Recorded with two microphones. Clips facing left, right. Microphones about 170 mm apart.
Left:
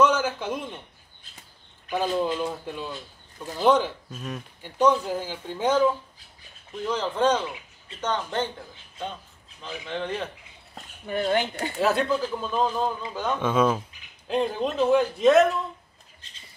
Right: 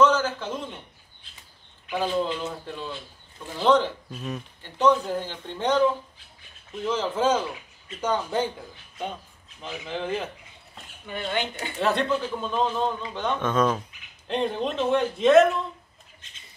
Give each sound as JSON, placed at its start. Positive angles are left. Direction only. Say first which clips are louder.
{"t": 0.0, "sound": "a sound", "louder": "right 1 dB", "side_deg": 15}
{"t": 2.4, "sound": "speech", "louder": "left 2 dB", "side_deg": 15}
{"t": 4.1, "sound": "a man's voice", "louder": "right 2 dB", "side_deg": 0}
{"t": 4.6, "sound": "speech", "louder": "even", "side_deg": 10}
{"t": 6.8, "sound": "a man's voice", "louder": "even", "side_deg": -5}
{"t": 9.6, "sound": "a man's voice", "louder": "even", "side_deg": -5}
{"t": 10.7, "sound": "speech", "louder": "left 5 dB", "side_deg": 40}
{"t": 11.8, "sound": "a man's voice", "louder": "left 1 dB", "side_deg": 5}